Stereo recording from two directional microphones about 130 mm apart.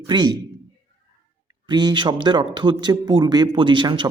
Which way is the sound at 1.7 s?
35° right (ahead or behind).